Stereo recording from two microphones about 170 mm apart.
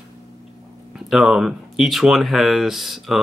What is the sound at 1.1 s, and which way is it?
Speech, centre (ahead or behind).